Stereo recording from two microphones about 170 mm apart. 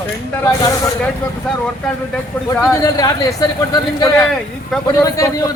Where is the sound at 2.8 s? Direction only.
20° left (ahead or behind).